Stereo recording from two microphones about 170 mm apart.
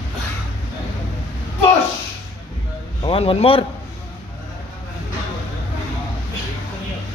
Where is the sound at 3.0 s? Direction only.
30° left (ahead or behind).